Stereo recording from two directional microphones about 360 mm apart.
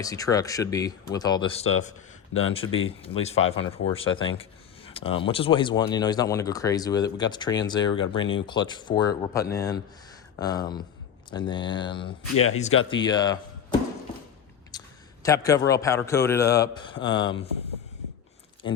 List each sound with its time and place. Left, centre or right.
0.0 s speech: centre
14.7 s a sound: centre
15.2 s speech: centre